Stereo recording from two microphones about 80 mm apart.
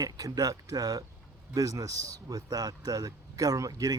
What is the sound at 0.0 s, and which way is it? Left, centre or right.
Speech, right.